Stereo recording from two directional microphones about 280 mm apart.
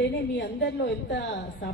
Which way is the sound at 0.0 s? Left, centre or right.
Left.